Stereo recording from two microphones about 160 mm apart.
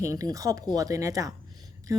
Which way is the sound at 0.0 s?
20° right (ahead or behind).